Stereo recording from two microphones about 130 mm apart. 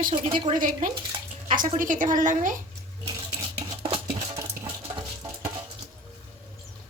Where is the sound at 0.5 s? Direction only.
90° right.